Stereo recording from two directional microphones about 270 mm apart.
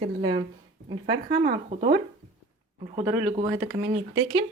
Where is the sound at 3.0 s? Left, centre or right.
Centre.